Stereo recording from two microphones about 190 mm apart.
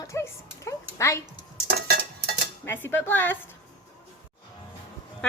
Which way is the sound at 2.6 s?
10° left (ahead or behind).